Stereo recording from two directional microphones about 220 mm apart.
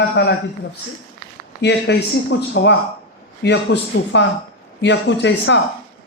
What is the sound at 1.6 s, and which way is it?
A man's voice, 50° left (ahead or behind).